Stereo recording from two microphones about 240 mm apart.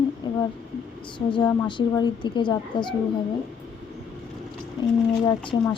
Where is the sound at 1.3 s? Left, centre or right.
Centre.